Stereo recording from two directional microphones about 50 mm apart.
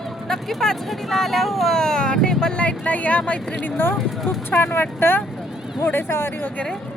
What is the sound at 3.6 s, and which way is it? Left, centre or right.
Speech, left.